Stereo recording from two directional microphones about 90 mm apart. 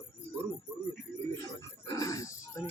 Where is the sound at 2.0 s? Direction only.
35° left (ahead or behind).